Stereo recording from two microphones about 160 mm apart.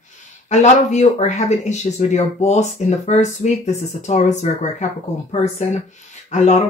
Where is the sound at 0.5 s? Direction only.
45° left (ahead or behind).